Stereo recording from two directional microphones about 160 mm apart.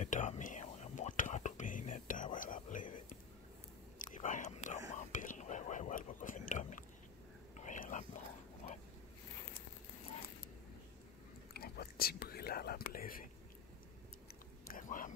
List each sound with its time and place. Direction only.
0.0 s whispering: 50° left (ahead or behind)
8.6 s a sound: 45° left (ahead or behind)
11.5 s whispering: 75° left (ahead or behind)
14.7 s whispering: 55° left (ahead or behind)